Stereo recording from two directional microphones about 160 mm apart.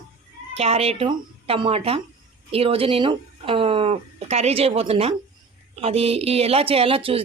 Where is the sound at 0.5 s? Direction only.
40° right (ahead or behind).